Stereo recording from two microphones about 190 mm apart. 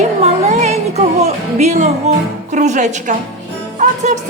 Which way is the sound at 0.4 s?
35° right (ahead or behind).